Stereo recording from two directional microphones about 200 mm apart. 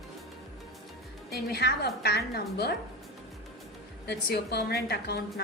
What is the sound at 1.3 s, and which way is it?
A woman's voice, 55° left (ahead or behind).